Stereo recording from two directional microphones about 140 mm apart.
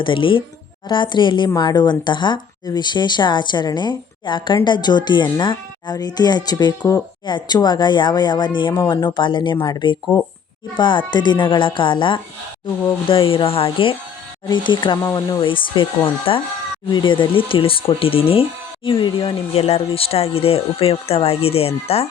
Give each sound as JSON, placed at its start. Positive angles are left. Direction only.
{"t": 0.0, "sound": "speech", "side_deg": 35}